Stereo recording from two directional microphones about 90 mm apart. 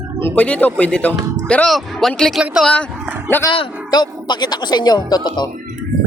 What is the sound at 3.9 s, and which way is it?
Speech, 50° left (ahead or behind).